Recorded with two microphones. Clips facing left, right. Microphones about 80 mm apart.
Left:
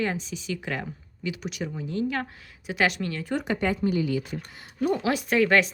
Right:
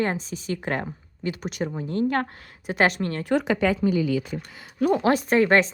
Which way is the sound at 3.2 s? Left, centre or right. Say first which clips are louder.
Right 6 dB; right.